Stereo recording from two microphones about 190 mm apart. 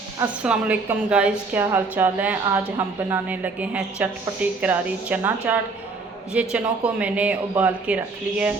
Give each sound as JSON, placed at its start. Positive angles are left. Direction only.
{"t": 0.4, "sound": "a woman's voice", "side_deg": -5}